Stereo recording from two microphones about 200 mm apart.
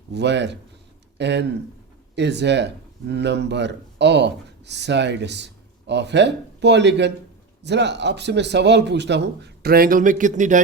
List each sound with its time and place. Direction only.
0.1 s speech: 60° right (ahead or behind); by 10.6 s 40° right (ahead or behind)